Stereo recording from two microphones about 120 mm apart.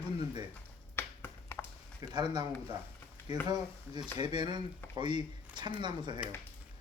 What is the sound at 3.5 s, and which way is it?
Speech, 35° right (ahead or behind).